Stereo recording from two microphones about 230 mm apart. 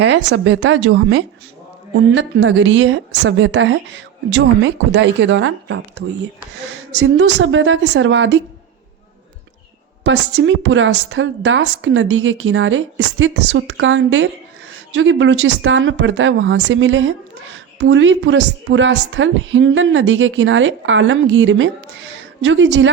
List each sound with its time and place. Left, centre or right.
0.0 s a woman's voice: right
10.0 s a woman's voice: right